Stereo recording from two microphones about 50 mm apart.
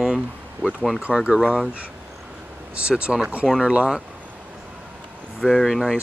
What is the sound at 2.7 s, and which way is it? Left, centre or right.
Speech, right.